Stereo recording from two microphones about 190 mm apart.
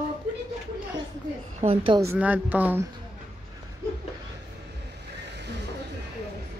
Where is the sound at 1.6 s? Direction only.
30° right (ahead or behind).